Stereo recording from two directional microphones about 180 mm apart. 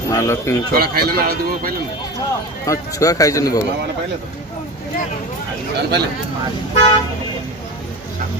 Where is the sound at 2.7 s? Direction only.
20° left (ahead or behind).